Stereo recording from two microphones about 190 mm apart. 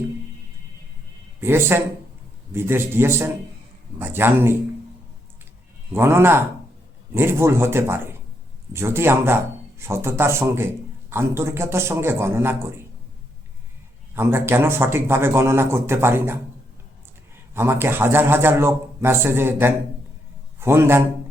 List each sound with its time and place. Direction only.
1.4 s a man's voice: 10° right (ahead or behind)
5.9 s a man's voice: 15° right (ahead or behind)
14.2 s a man's voice: 10° right (ahead or behind)
17.5 s a man's voice: 10° right (ahead or behind)